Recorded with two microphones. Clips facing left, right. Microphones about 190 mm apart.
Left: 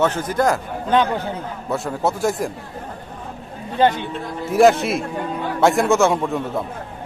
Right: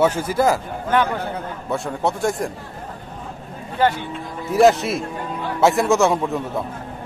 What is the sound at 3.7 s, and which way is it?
Speech, 20° left (ahead or behind).